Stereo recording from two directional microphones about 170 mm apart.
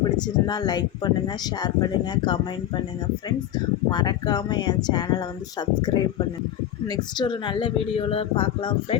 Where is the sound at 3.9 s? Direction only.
25° left (ahead or behind).